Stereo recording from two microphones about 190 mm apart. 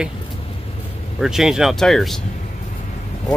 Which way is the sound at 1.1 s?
Centre (ahead or behind).